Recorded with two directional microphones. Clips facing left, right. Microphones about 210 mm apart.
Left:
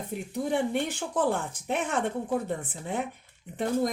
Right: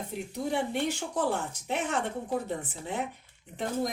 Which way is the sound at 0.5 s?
55° left (ahead or behind).